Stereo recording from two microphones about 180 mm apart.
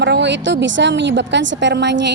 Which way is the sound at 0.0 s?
75° right (ahead or behind).